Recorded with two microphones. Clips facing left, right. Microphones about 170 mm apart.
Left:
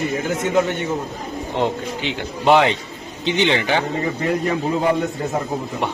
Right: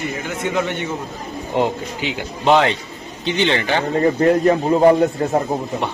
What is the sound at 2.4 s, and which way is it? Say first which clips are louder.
A man's voice: even; 15° left (ahead or behind).